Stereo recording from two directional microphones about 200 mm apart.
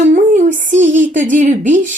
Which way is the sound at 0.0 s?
35° right (ahead or behind).